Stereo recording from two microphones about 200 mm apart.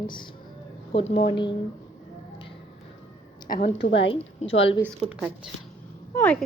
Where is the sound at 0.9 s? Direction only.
30° left (ahead or behind).